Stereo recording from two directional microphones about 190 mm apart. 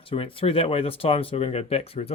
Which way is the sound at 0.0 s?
30° left (ahead or behind).